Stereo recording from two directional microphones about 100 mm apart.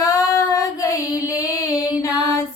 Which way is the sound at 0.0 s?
35° left (ahead or behind).